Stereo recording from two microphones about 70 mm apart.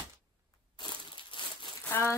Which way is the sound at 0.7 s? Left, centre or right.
Left.